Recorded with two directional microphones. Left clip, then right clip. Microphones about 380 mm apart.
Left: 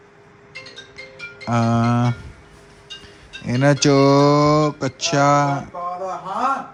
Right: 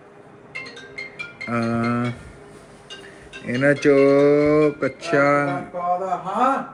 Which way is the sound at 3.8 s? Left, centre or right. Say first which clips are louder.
Even; centre.